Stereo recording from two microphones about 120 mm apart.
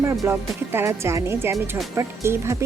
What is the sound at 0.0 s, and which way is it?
Speech, 20° right (ahead or behind).